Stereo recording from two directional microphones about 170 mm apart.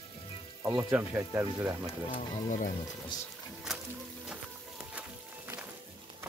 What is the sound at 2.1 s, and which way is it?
Speech, 50° left (ahead or behind).